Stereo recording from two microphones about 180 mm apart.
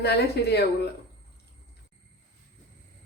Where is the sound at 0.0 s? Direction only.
65° left (ahead or behind).